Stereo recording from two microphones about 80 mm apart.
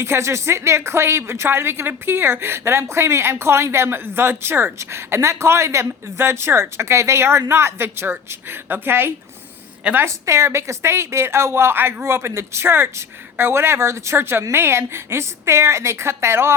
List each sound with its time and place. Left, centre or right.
0.0 s a woman's voice: right
10.2 s a woman's voice: right